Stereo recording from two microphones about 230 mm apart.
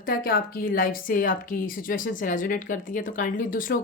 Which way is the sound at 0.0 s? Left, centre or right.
Left.